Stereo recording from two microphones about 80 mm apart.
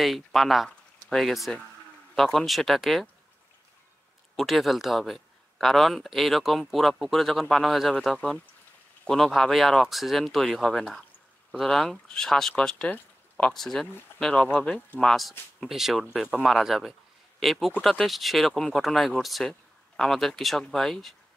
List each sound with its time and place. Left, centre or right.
0.0 s a man's voice: centre
4.4 s a man's voice: centre